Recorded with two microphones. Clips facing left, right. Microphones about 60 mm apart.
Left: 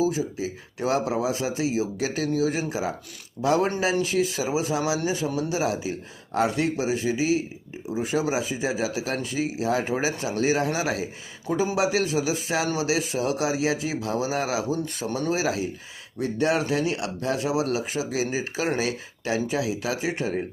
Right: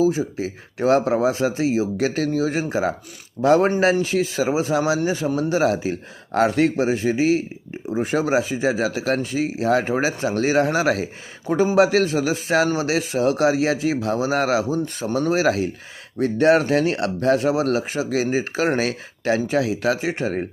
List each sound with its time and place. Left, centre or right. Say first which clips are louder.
0.0 s speech: right 5 dB; right
4.0 s speech: right 4 dB; right
6.3 s speech: right 6 dB; right
6.8 s speech: right 5 dB; right
15.3 s speech: right 6 dB; right